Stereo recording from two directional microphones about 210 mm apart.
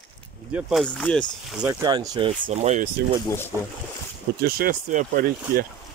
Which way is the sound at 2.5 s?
35° right (ahead or behind).